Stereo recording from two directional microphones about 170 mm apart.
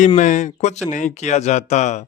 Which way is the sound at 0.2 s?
45° left (ahead or behind).